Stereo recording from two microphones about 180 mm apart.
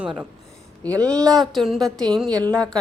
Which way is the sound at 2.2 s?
20° right (ahead or behind).